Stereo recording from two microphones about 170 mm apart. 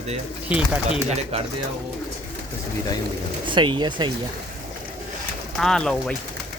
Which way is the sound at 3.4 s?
30° right (ahead or behind).